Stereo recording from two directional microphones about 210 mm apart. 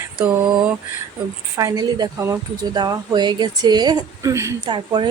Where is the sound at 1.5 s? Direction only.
15° right (ahead or behind).